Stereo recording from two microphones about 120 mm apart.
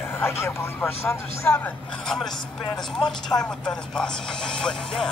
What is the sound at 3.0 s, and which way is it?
Speech, 5° left (ahead or behind).